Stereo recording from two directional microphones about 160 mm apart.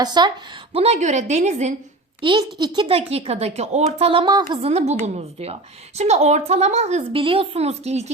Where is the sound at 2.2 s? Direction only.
30° right (ahead or behind).